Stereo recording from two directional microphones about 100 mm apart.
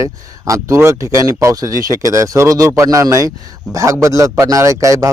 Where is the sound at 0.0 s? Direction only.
30° right (ahead or behind).